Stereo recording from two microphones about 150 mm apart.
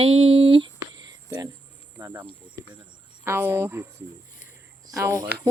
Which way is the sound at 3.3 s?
15° right (ahead or behind).